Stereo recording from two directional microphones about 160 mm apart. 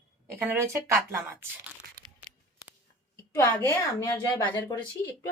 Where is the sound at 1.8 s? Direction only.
65° right (ahead or behind).